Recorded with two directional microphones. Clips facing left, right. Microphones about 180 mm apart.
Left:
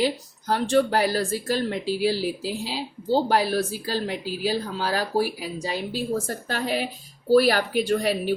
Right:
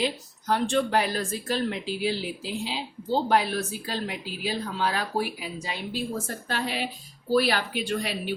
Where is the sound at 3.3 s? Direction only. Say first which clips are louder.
Left 2 dB; 35° left (ahead or behind).